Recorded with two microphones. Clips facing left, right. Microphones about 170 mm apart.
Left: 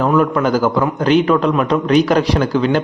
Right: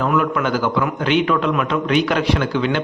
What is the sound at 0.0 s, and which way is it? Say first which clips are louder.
A man's voice: left 4 dB; 35° left (ahead or behind).